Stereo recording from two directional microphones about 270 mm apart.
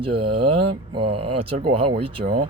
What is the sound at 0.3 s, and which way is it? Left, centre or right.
Speech, right.